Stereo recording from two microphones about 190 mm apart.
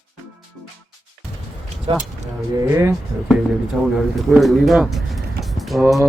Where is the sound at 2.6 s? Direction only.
15° right (ahead or behind).